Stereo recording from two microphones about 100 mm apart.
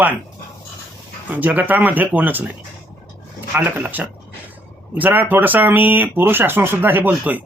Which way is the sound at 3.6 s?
15° right (ahead or behind).